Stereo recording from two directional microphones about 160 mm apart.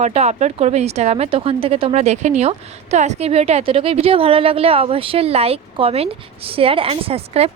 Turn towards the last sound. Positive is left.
turn(degrees=-40)  # may be behind; listen again after turning